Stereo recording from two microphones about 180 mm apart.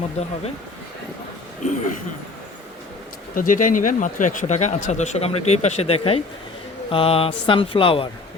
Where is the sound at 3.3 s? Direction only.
50° left (ahead or behind).